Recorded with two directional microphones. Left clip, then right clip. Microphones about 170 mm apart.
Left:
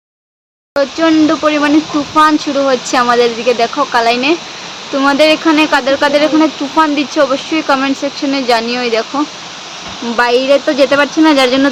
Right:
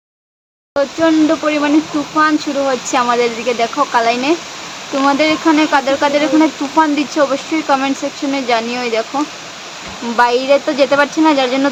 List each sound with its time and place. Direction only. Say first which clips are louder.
0.8 s speech: left 2 dB; 15° left (ahead or behind)